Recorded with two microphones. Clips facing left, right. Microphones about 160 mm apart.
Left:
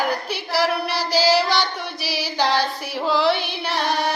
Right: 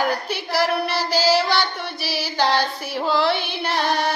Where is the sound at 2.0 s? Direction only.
40° right (ahead or behind).